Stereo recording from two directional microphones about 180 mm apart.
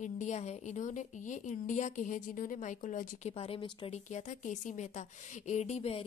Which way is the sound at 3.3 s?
30° left (ahead or behind).